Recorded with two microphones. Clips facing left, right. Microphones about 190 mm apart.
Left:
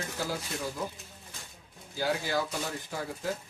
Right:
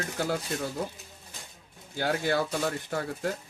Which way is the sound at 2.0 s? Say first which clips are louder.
Right 3 dB; 60° right (ahead or behind).